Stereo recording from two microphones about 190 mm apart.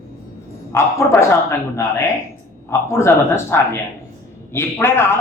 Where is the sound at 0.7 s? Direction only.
15° left (ahead or behind).